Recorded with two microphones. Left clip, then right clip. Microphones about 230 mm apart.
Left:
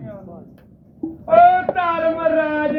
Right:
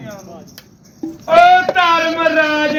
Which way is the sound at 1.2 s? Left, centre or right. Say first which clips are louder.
Right 3 dB; centre.